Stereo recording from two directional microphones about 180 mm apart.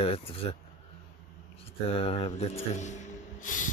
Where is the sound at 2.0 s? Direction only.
30° left (ahead or behind).